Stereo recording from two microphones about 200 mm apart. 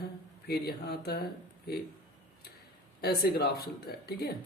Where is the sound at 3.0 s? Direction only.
50° left (ahead or behind).